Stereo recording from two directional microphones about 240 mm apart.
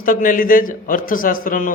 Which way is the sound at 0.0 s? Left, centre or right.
Left.